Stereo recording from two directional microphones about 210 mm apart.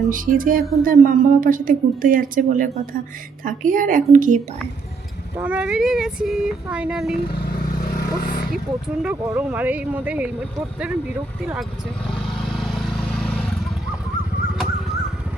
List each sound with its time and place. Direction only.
0.1 s speech: 40° right (ahead or behind)
5.4 s speech: 5° right (ahead or behind)
7.2 s speech: 50° left (ahead or behind)
7.9 s vehicle: 50° left (ahead or behind)
8.5 s speech: 5° right (ahead or behind)
12.5 s vehicle: centre (ahead or behind)